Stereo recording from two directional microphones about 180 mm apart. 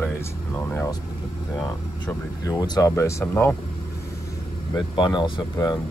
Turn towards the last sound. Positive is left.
turn(degrees=25)  # may be behind; listen again after turning